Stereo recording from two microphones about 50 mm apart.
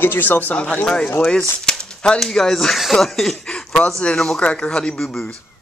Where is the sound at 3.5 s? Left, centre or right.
Centre.